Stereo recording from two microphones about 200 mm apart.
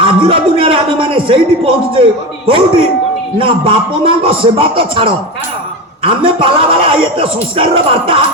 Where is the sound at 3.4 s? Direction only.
25° right (ahead or behind).